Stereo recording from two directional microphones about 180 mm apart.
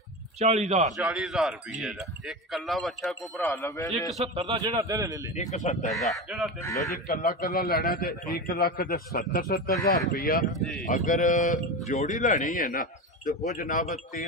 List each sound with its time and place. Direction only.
0.4 s a man's voice: 35° right (ahead or behind)
0.8 s speech: centre (ahead or behind)
3.6 s a man's voice: 15° left (ahead or behind)
4.2 s a man's voice: 35° right (ahead or behind)
5.5 s speech: 45° left (ahead or behind)
5.9 s speech: centre (ahead or behind)
6.6 s a man's voice: 15° left (ahead or behind)
7.1 s a man's voice: 55° left (ahead or behind)
10.4 s speech: centre (ahead or behind)
11.1 s speech: 45° left (ahead or behind)